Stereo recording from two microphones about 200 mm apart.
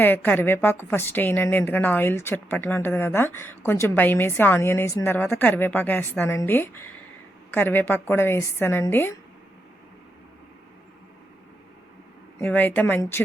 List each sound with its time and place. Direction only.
0.0 s a woman's voice: 10° left (ahead or behind)
12.4 s a woman's voice: 10° left (ahead or behind)